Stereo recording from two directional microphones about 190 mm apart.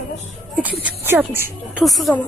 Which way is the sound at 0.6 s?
10° right (ahead or behind).